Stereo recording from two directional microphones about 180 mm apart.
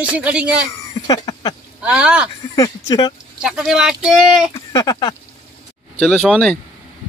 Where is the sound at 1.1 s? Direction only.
20° left (ahead or behind).